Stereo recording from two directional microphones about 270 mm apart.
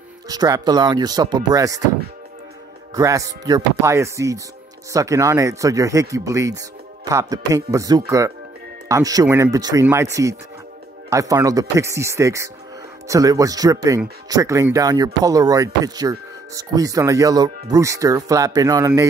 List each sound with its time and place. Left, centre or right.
0.3 s speech: centre
2.9 s speech: centre